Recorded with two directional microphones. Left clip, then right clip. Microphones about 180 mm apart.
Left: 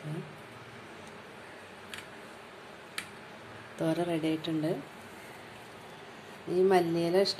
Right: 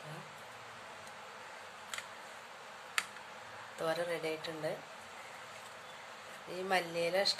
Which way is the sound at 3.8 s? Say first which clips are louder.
Left 5 dB; 5° left (ahead or behind).